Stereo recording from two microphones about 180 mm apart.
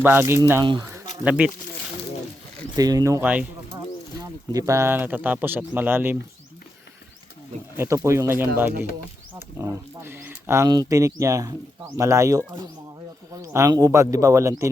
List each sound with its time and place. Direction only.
0.0 s speech: 10° right (ahead or behind)
0.6 s speech: 25° right (ahead or behind)
1.2 s speech: 10° right (ahead or behind)
2.7 s speech: 20° right (ahead or behind)
7.8 s speech: 15° right (ahead or behind)